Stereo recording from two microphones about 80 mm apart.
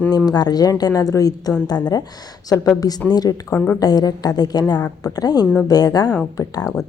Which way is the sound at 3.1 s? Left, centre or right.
Left.